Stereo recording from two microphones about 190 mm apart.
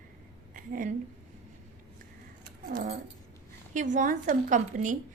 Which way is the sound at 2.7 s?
50° right (ahead or behind).